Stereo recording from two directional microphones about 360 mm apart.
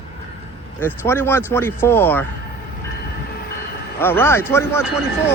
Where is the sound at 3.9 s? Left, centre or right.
Centre.